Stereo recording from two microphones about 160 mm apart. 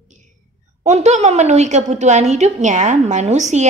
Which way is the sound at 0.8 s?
45° right (ahead or behind).